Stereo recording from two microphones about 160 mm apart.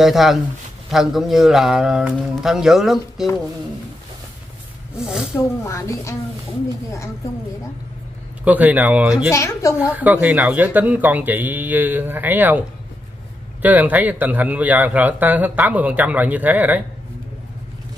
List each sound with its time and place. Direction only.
0.0 s speech: centre (ahead or behind)
4.9 s speech: 5° right (ahead or behind)
5.6 s a woman's voice: 20° left (ahead or behind)
8.5 s a man's voice: 10° right (ahead or behind)
9.3 s a woman's voice: 20° left (ahead or behind)
9.8 s a man's voice: 10° right (ahead or behind)